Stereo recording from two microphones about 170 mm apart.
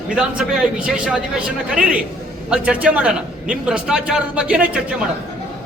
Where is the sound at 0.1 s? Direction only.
5° right (ahead or behind).